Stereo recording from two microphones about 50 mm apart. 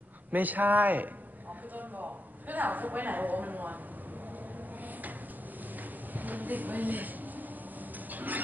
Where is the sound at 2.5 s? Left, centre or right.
Right.